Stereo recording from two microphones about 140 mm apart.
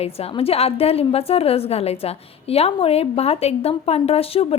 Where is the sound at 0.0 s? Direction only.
45° left (ahead or behind).